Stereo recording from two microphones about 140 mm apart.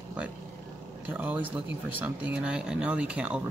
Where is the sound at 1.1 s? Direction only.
10° right (ahead or behind).